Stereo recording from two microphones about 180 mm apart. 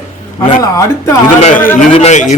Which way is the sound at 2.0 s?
40° left (ahead or behind).